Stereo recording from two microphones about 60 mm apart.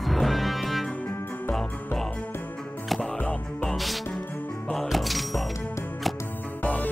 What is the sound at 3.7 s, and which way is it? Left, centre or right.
Music, centre.